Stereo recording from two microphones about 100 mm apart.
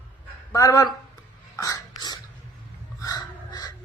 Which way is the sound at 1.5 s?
40° left (ahead or behind).